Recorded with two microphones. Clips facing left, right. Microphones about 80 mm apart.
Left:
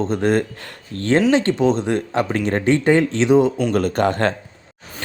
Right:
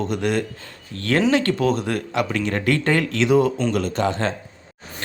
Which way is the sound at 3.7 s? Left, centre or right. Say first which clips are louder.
Left 4 dB; left.